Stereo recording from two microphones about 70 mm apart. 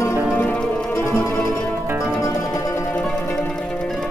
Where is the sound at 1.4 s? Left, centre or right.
Centre.